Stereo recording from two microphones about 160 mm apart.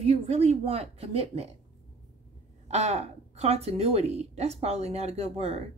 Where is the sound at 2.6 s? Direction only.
45° right (ahead or behind).